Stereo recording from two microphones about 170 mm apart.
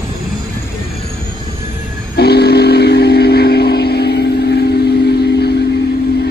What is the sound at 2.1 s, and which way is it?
Train, 75° left (ahead or behind).